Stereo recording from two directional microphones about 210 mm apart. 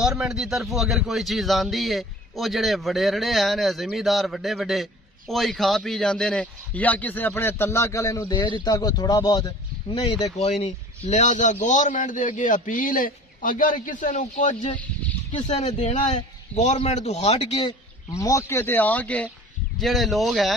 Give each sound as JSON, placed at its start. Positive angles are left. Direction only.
{"t": 0.2, "sound": "a man's voice", "side_deg": 0}